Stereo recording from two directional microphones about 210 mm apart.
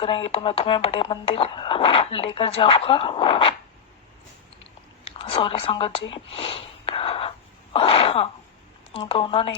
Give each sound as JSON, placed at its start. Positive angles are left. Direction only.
{"t": 0.0, "sound": "speech", "side_deg": 25}
{"t": 5.1, "sound": "a sound", "side_deg": 25}
{"t": 8.9, "sound": "speech", "side_deg": 25}